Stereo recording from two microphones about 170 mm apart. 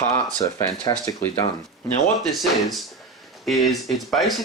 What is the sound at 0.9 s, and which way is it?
Speech, 20° left (ahead or behind).